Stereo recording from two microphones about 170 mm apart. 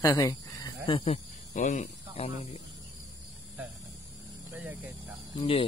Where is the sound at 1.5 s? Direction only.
45° left (ahead or behind).